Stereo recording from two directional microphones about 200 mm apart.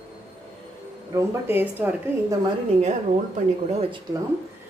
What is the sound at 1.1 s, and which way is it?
A woman's voice, 15° right (ahead or behind).